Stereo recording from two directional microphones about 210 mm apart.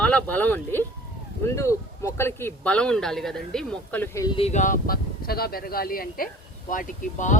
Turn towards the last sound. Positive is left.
turn(degrees=40)  # may be behind; listen again after turning